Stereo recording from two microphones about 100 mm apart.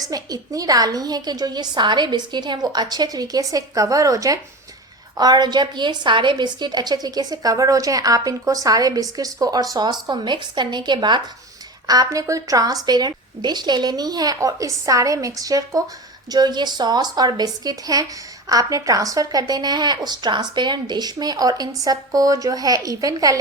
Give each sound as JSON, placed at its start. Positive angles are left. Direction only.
{"t": 0.0, "sound": "a woman's voice", "side_deg": -35}
{"t": 11.9, "sound": "a woman's voice", "side_deg": -35}